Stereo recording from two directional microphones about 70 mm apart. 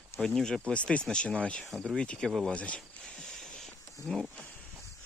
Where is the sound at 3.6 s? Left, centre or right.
Centre.